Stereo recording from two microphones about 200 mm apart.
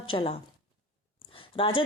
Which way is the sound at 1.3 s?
25° left (ahead or behind).